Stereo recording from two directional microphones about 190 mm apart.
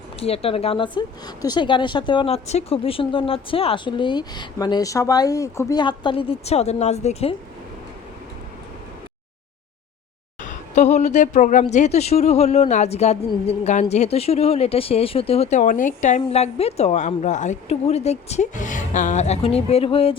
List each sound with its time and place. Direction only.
0.2 s a woman's voice: 30° left (ahead or behind)
10.4 s a woman's voice: 40° left (ahead or behind)